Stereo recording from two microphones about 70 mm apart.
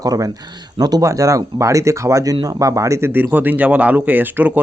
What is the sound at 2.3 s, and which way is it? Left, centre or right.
Speech, right.